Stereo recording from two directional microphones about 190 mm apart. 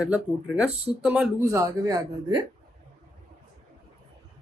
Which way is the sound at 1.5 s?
15° right (ahead or behind).